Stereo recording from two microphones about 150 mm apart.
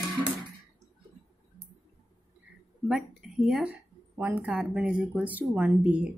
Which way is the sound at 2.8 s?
Centre (ahead or behind).